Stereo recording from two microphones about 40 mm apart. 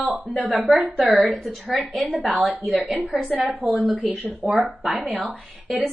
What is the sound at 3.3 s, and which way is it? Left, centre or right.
Speech, right.